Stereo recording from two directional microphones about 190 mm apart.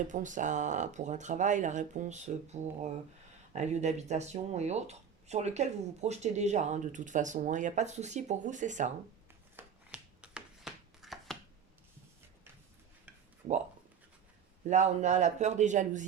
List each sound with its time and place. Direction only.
0.1 s speech: 40° right (ahead or behind)
9.6 s chopping: 5° right (ahead or behind)
14.7 s speech: 40° right (ahead or behind)